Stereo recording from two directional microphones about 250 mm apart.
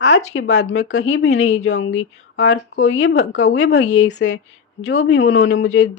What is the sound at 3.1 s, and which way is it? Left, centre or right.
Speech, left.